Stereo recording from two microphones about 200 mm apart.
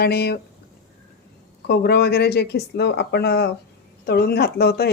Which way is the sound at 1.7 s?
55° left (ahead or behind).